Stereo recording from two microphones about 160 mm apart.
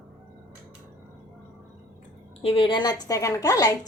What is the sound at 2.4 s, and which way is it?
A woman's voice, 35° left (ahead or behind).